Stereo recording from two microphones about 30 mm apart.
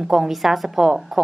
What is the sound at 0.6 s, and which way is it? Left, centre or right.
Speech, centre.